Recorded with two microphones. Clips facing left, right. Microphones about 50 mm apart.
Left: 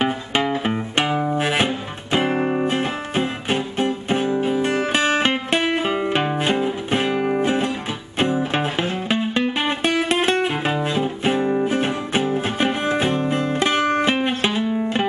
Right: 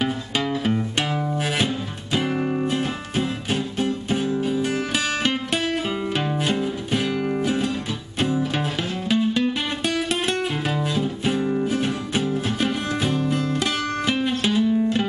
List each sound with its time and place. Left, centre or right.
0.0 s music: left